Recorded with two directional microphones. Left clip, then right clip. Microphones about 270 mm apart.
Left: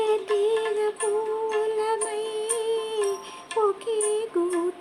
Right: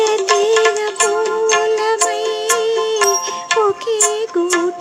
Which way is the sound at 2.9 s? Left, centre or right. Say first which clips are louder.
Right 12 dB; right.